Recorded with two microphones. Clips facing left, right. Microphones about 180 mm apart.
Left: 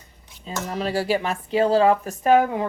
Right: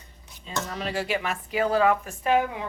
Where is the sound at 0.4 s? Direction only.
35° left (ahead or behind).